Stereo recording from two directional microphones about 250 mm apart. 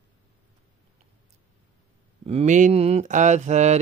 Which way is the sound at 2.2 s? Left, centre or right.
Right.